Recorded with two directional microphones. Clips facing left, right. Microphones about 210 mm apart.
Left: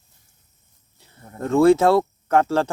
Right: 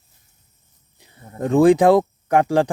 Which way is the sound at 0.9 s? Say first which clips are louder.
Right 4 dB; 15° right (ahead or behind).